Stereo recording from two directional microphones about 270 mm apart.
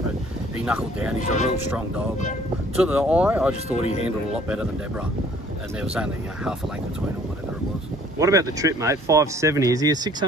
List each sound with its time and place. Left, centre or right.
0.6 s speech: centre
1.2 s speech: left
2.7 s speech: centre
8.2 s speech: centre